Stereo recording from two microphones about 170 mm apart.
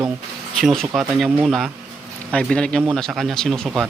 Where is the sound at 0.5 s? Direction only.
Centre (ahead or behind).